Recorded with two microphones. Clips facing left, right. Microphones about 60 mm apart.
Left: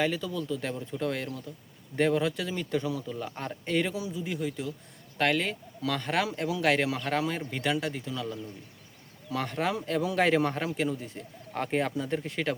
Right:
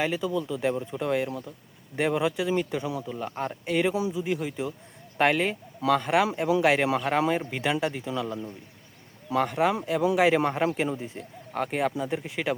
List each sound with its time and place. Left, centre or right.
0.0 s speech: centre
3.9 s speech: right
9.3 s speech: centre
11.5 s speech: centre